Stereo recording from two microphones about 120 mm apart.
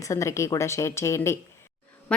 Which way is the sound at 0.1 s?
25° left (ahead or behind).